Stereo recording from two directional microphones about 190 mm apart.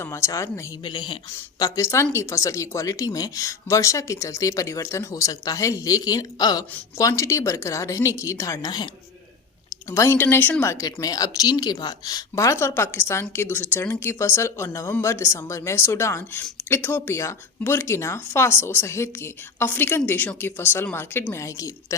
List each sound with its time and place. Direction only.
0.0 s a woman's voice: 15° left (ahead or behind)
9.9 s a woman's voice: 15° left (ahead or behind)